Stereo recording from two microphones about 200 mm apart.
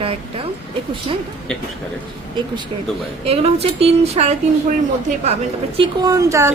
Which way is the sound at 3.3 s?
30° right (ahead or behind).